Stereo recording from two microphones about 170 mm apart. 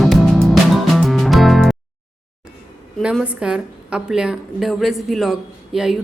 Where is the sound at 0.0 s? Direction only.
Centre (ahead or behind).